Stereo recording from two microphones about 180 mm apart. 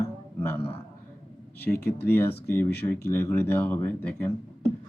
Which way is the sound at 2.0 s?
10° left (ahead or behind).